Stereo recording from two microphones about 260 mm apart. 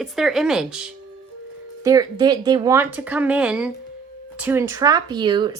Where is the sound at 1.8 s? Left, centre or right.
Centre.